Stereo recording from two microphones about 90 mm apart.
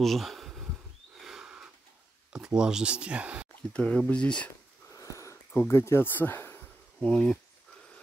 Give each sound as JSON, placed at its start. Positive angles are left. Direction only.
{"t": 0.0, "sound": "bee", "side_deg": 0}
{"t": 1.2, "sound": "a sound", "side_deg": -10}
{"t": 2.3, "sound": "speech", "side_deg": -10}
{"t": 3.7, "sound": "speech", "side_deg": 10}
{"t": 4.9, "sound": "a sound", "side_deg": 35}
{"t": 5.5, "sound": "speech", "side_deg": 25}
{"t": 7.0, "sound": "speech", "side_deg": 10}